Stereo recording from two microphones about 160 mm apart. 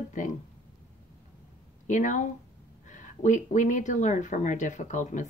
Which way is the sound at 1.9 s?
50° left (ahead or behind).